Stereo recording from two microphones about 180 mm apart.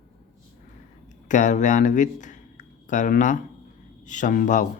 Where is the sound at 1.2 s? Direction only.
45° left (ahead or behind).